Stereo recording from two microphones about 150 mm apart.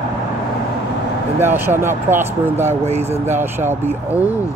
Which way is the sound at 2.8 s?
45° right (ahead or behind).